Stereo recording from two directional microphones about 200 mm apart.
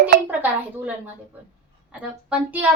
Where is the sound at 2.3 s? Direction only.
10° right (ahead or behind).